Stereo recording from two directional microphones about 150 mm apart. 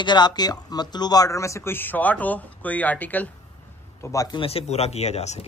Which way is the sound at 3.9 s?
20° left (ahead or behind).